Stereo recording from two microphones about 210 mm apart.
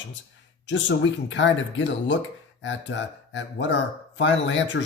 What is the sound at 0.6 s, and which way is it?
Speech, 60° left (ahead or behind).